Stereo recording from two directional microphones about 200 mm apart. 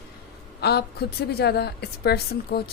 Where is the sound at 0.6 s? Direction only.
55° left (ahead or behind).